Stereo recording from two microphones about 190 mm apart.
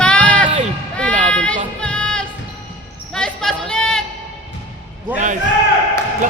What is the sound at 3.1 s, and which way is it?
Basketball bounce, 5° left (ahead or behind).